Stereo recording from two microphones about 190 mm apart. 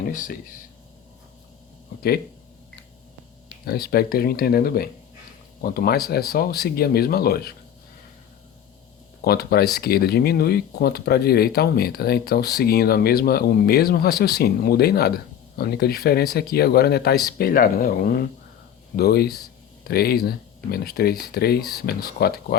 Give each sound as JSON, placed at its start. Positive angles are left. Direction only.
{"t": 0.0, "sound": "speech", "side_deg": 45}
{"t": 2.0, "sound": "speech", "side_deg": 55}
{"t": 3.7, "sound": "speech", "side_deg": 55}
{"t": 9.2, "sound": "speech", "side_deg": 55}